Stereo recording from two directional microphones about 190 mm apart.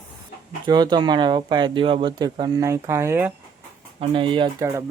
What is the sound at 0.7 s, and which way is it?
Speech, 20° right (ahead or behind).